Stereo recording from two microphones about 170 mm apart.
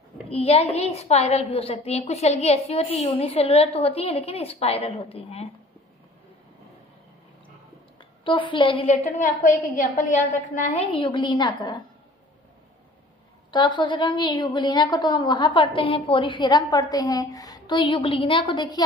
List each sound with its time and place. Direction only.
0.3 s a woman's voice: 35° left (ahead or behind)
8.2 s a woman's voice: 30° left (ahead or behind)
9.0 s a woman's voice: 50° left (ahead or behind); by 11.7 s 25° left (ahead or behind)
13.5 s a woman's voice: 25° left (ahead or behind)